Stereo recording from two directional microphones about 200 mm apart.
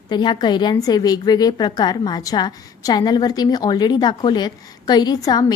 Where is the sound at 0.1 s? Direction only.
20° left (ahead or behind).